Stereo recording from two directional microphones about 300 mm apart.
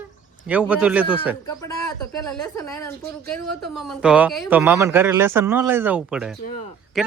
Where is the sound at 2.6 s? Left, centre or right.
Centre.